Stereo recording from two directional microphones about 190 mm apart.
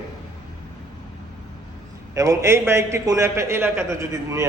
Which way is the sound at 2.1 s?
15° right (ahead or behind).